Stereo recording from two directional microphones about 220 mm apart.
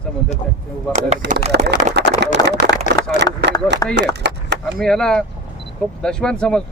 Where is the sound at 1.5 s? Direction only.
50° right (ahead or behind).